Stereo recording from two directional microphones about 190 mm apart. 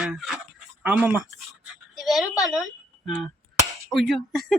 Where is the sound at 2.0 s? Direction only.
Centre (ahead or behind).